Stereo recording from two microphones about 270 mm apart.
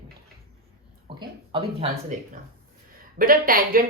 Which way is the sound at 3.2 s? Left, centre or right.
Right.